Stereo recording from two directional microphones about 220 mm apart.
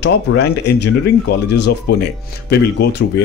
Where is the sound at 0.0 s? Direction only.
50° left (ahead or behind).